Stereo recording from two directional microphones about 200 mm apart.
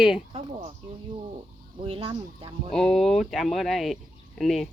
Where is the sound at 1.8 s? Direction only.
25° right (ahead or behind).